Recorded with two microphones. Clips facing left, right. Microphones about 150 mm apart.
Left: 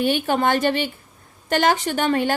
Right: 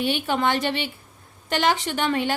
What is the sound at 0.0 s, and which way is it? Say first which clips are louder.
Speech: left 3 dB; 45° left (ahead or behind).